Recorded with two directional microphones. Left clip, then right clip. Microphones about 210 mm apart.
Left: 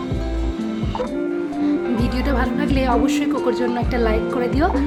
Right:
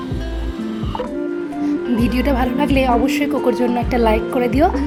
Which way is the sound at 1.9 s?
15° right (ahead or behind).